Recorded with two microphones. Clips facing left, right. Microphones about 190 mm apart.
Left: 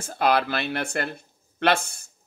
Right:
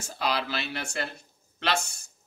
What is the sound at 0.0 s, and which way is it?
Speech, 55° left (ahead or behind).